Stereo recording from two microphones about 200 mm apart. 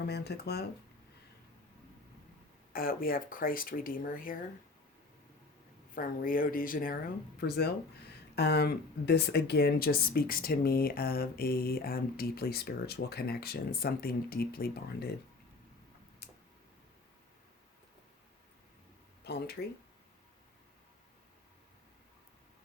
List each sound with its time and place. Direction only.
0.1 s speech: 55° left (ahead or behind)
2.7 s speech: 45° left (ahead or behind)
5.9 s speech: 45° left (ahead or behind)
16.2 s tick-tock: 55° left (ahead or behind)
19.2 s speech: 55° left (ahead or behind)